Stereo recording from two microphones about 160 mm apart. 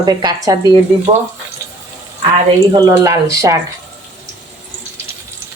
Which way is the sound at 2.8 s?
20° right (ahead or behind).